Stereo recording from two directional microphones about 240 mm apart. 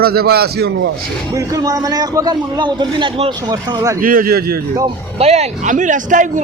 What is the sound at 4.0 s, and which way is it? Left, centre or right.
Speech, right.